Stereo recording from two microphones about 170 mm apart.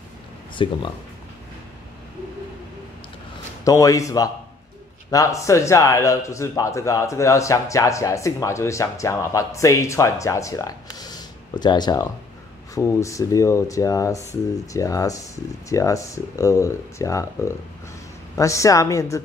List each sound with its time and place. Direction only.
0.6 s speech: 30° left (ahead or behind)
3.6 s speech: 20° left (ahead or behind)